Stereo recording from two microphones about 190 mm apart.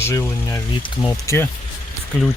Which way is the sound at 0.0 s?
15° left (ahead or behind).